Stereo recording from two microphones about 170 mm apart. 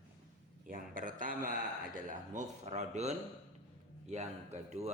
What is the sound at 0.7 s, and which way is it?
Speech, 55° right (ahead or behind).